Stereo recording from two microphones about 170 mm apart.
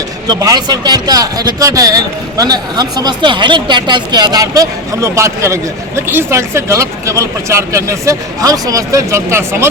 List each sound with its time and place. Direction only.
0.3 s a man's voice: 20° right (ahead or behind)